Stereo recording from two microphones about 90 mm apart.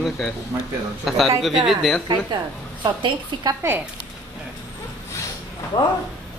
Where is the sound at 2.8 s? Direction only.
50° right (ahead or behind).